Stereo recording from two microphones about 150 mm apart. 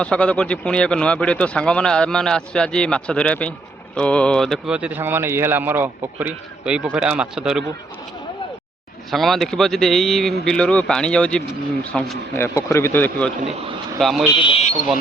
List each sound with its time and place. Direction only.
0.0 s a man's voice: 5° left (ahead or behind)
4.7 s a man's voice: 10° right (ahead or behind)
9.0 s speech: centre (ahead or behind)
12.4 s a man's voice: 20° left (ahead or behind)
13.4 s a man's voice: 45° right (ahead or behind)
14.0 s speech: centre (ahead or behind)
14.4 s speech: 40° left (ahead or behind)